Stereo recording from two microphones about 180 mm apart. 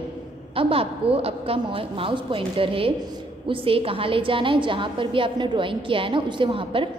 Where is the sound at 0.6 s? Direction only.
30° right (ahead or behind).